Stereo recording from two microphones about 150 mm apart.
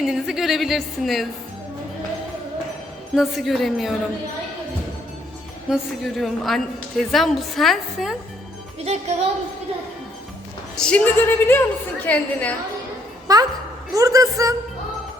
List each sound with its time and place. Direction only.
0.0 s a woman's voice: 5° right (ahead or behind)
3.2 s a woman's voice: centre (ahead or behind)
5.6 s a woman's voice: centre (ahead or behind)
8.8 s speech: 45° right (ahead or behind)
10.8 s a woman's voice: 5° left (ahead or behind)
13.2 s a sound: 25° right (ahead or behind)
13.9 s a woman's voice: 20° right (ahead or behind)